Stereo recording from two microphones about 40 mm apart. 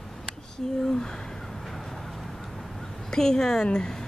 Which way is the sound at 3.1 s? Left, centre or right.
Centre.